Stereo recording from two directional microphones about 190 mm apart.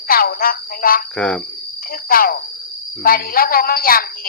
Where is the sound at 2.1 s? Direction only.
50° left (ahead or behind).